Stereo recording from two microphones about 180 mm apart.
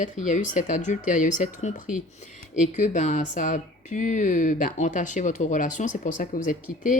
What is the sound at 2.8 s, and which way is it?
Speech, 40° left (ahead or behind).